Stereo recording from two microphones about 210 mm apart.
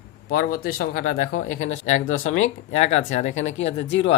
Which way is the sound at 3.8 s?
60° left (ahead or behind).